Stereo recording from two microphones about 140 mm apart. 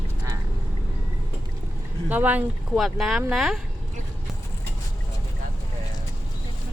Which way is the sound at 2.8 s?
Centre (ahead or behind).